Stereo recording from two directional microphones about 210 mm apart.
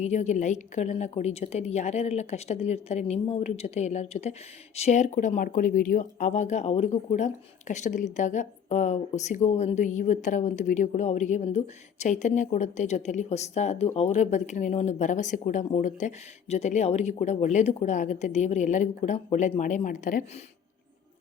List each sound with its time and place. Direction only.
0.0 s speech: 30° left (ahead or behind)